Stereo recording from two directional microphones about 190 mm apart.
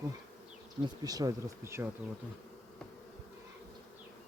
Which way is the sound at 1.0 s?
20° right (ahead or behind).